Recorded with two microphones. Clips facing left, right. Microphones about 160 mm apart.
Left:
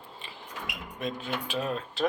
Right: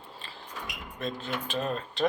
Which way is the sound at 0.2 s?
20° left (ahead or behind).